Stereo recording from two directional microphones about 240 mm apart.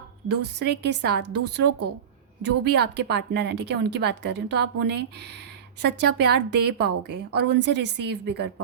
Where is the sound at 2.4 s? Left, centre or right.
Right.